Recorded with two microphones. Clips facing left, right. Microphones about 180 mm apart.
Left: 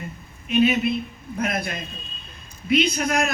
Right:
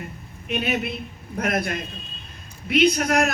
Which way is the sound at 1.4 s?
60° right (ahead or behind).